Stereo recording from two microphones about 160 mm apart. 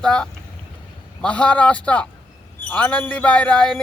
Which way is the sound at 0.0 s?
5° left (ahead or behind).